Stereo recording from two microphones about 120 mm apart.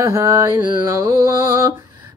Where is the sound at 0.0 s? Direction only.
25° right (ahead or behind).